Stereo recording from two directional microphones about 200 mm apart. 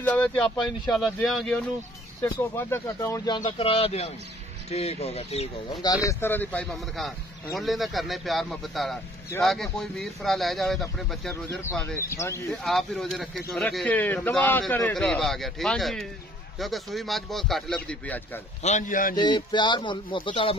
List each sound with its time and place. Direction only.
0.0 s a man's voice: 5° left (ahead or behind)
2.2 s speech: 15° left (ahead or behind); by 5.5 s 30° left (ahead or behind)
6.0 s a man's voice: 10° left (ahead or behind)
11.6 s speech: 15° left (ahead or behind)
12.4 s a man's voice: centre (ahead or behind)
18.6 s speech: 35° left (ahead or behind)
19.1 s speech: 20° left (ahead or behind)